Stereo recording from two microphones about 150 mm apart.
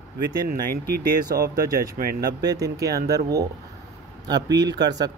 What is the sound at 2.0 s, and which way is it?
Speech, 80° right.